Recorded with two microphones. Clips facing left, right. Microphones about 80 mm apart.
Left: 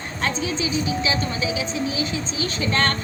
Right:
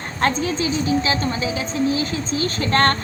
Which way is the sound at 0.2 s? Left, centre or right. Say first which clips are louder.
Right 5 dB; right.